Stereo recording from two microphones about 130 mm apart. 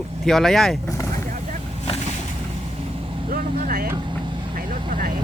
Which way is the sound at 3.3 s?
90° right.